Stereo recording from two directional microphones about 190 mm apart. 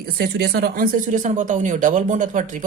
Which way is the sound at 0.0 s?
55° right (ahead or behind).